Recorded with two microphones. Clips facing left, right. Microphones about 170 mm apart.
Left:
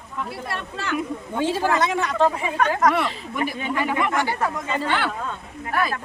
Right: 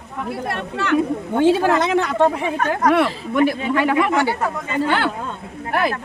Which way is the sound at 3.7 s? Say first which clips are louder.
Right 3 dB; 75° right (ahead or behind).